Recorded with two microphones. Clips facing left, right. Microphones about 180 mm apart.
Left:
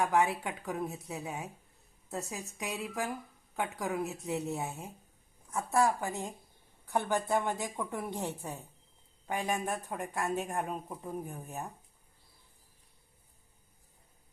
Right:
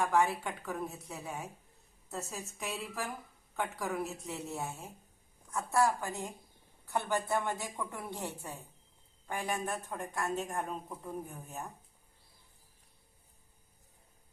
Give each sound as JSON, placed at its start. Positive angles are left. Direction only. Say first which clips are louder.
{"t": 0.0, "sound": "speech", "louder": "left 1 dB", "side_deg": 20}
{"t": 5.7, "sound": "speech", "louder": "left 1 dB", "side_deg": 20}